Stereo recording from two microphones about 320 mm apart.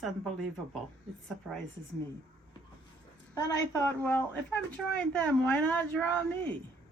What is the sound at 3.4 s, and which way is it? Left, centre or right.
Speech, centre.